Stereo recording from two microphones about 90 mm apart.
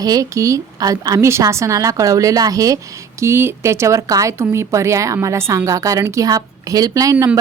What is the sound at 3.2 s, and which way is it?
Speech, 30° right (ahead or behind).